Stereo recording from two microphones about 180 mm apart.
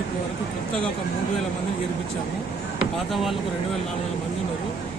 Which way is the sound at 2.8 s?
Centre (ahead or behind).